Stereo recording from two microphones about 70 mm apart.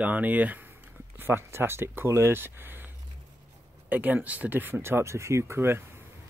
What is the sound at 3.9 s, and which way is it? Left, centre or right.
Speech, right.